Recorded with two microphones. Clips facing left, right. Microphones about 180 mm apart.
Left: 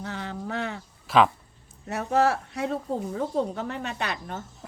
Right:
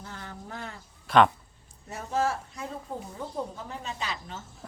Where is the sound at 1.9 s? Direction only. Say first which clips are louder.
Left 6 dB; 70° left (ahead or behind).